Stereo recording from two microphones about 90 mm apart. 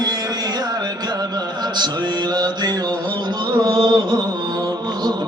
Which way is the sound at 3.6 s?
55° right (ahead or behind).